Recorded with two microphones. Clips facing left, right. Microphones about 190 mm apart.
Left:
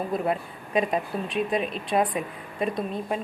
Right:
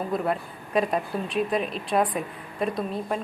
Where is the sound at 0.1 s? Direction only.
Centre (ahead or behind).